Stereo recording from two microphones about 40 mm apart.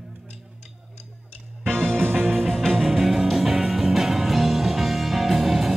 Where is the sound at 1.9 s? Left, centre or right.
Right.